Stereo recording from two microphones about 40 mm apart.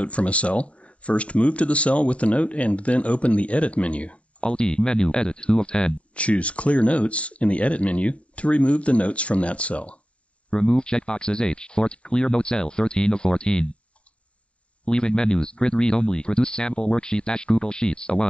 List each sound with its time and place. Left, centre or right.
0.0 s speech: left
10.5 s speech: left
14.9 s speech: left